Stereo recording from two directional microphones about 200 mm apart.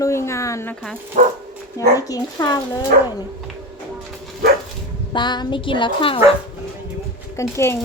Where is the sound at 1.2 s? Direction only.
40° right (ahead or behind).